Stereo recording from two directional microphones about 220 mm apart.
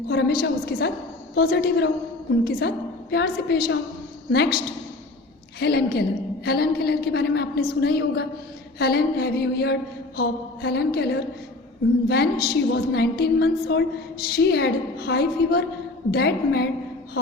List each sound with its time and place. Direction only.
0.1 s a woman's voice: 45° left (ahead or behind)